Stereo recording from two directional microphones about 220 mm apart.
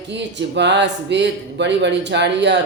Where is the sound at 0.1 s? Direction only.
55° right (ahead or behind).